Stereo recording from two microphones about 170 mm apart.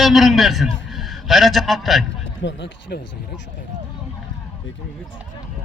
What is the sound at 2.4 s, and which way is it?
Speech, 90° left.